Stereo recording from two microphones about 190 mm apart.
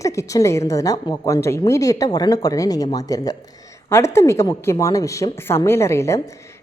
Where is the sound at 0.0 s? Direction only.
15° left (ahead or behind).